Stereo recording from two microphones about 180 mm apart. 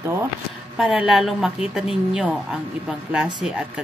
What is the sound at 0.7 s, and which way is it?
A woman's voice, 5° right (ahead or behind).